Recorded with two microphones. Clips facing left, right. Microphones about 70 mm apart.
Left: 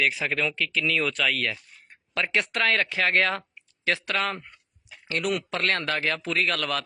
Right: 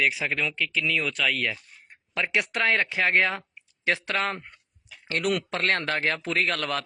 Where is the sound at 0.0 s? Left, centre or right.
Centre; by 4.4 s right.